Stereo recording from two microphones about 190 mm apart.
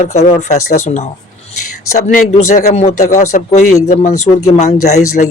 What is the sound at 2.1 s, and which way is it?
Speech, 40° left (ahead or behind).